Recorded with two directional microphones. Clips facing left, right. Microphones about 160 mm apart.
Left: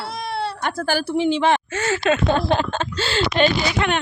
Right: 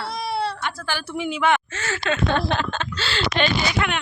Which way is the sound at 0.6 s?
45° left (ahead or behind).